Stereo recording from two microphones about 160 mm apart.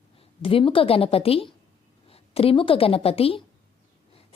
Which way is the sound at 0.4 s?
35° left (ahead or behind).